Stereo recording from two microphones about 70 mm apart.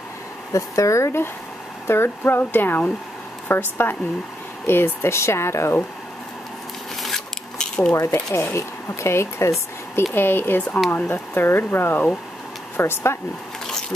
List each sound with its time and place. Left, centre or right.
0.5 s speech: left
7.0 s a sound: centre
7.5 s cutlery: centre
7.9 s speech: left
10.1 s speech: left